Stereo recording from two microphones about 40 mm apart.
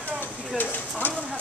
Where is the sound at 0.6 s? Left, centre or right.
Left.